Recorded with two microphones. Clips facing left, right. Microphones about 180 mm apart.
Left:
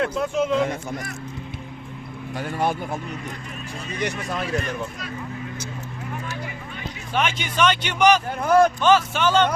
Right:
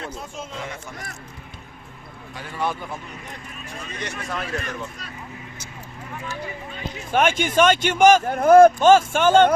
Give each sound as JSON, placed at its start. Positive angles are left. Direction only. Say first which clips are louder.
{"t": 0.0, "sound": "a man's voice", "louder": "left 11 dB", "side_deg": 70}
{"t": 2.4, "sound": "speech", "louder": "left 3 dB", "side_deg": 45}
{"t": 4.3, "sound": "speech", "louder": "left 3 dB", "side_deg": 15}
{"t": 7.1, "sound": "speech", "louder": "right 5 dB", "side_deg": -50}